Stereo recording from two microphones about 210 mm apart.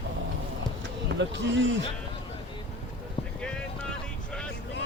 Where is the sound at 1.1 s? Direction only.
60° right (ahead or behind).